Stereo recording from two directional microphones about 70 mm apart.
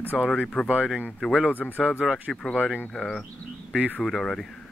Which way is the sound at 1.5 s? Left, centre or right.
Left.